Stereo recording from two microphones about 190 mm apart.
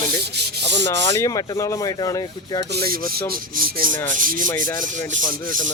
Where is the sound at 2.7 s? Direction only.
50° right (ahead or behind).